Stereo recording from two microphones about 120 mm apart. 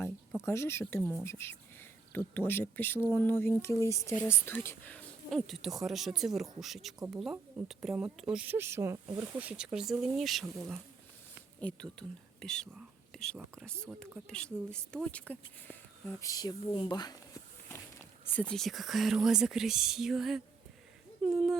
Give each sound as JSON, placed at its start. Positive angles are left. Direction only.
{"t": 0.4, "sound": "speech", "side_deg": 20}
{"t": 5.3, "sound": "speech", "side_deg": 0}
{"t": 9.4, "sound": "speech", "side_deg": -10}
{"t": 11.6, "sound": "speech", "side_deg": 5}
{"t": 16.2, "sound": "speech", "side_deg": 30}
{"t": 18.3, "sound": "speech", "side_deg": 5}